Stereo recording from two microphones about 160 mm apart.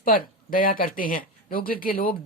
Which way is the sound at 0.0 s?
60° left (ahead or behind).